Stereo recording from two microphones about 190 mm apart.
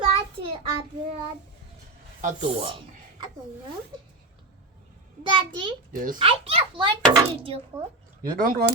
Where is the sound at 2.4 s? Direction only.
25° right (ahead or behind).